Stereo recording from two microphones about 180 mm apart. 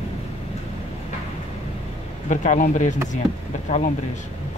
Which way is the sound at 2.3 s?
45° left (ahead or behind).